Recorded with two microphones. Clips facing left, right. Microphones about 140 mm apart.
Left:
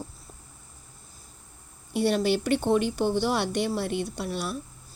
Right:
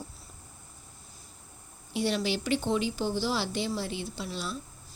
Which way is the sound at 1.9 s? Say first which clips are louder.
Left 5 dB; 55° left (ahead or behind).